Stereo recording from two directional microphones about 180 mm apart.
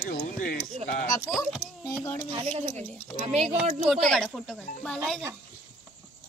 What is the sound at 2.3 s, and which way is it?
A child's voice, 30° right (ahead or behind).